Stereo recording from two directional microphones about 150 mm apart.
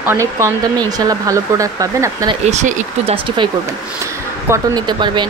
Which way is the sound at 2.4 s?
50° right (ahead or behind).